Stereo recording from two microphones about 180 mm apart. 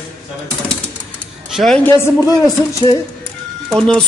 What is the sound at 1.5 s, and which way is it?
Speech, centre (ahead or behind).